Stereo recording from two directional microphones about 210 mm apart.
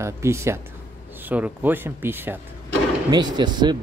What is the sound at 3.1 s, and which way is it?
Speech, 20° right (ahead or behind).